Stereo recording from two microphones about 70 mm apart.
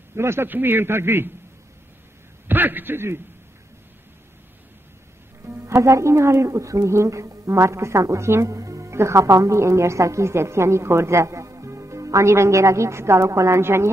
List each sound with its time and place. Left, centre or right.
0.1 s a man's voice: right
2.4 s a man's voice: right
5.4 s speech: right